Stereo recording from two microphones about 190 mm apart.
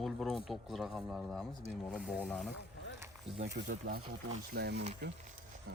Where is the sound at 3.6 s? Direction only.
45° right (ahead or behind).